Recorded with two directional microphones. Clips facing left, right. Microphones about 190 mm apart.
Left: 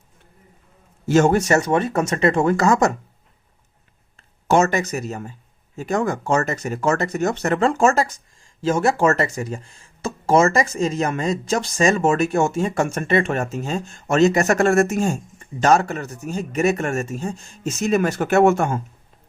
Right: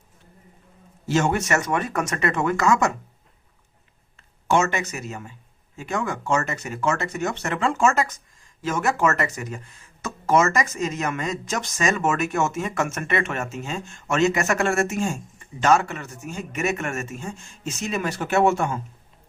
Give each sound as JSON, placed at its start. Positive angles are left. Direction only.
{"t": 1.0, "sound": "speech", "side_deg": 45}
{"t": 4.4, "sound": "speech", "side_deg": 40}